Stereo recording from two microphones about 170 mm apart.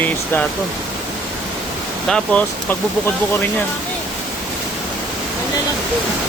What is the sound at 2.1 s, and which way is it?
Speech, 5° left (ahead or behind).